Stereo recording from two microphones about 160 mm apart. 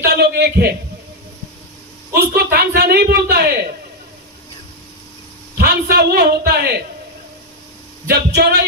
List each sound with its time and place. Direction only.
0.0 s a sound: 75° right (ahead or behind)
2.1 s a man's voice: 75° right (ahead or behind)
5.5 s a man's voice: 80° right
8.0 s speech: 85° right